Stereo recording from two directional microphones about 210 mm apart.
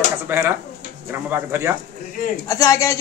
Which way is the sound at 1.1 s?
10° right (ahead or behind).